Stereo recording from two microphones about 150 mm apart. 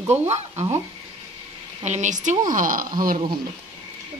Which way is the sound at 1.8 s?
50° right (ahead or behind).